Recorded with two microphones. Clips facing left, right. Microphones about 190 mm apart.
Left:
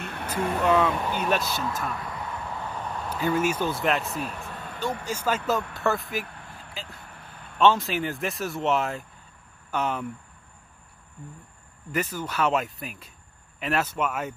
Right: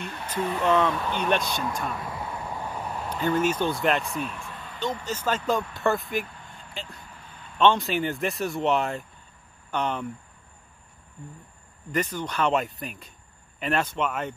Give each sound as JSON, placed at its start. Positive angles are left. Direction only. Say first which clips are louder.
{"t": 0.0, "sound": "a sound", "louder": "left 1 dB", "side_deg": 60}
{"t": 0.4, "sound": "speech", "louder": "left 1 dB", "side_deg": 50}
{"t": 0.7, "sound": "speech", "louder": "even", "side_deg": 10}
{"t": 2.1, "sound": "vehicle", "louder": "right 1 dB", "side_deg": -15}
{"t": 3.1, "sound": "speech", "louder": "right 1 dB", "side_deg": 5}
{"t": 4.2, "sound": "a sound", "louder": "even", "side_deg": 40}
{"t": 4.7, "sound": "speech", "louder": "even", "side_deg": 10}
{"t": 6.7, "sound": "vehicle", "louder": "right 2 dB", "side_deg": 0}
{"t": 7.5, "sound": "speech", "louder": "even", "side_deg": 5}
{"t": 11.9, "sound": "speech", "louder": "right 1 dB", "side_deg": 5}